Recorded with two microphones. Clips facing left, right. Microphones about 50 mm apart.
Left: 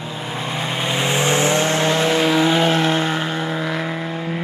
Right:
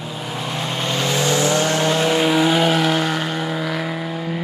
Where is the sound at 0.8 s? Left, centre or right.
Left.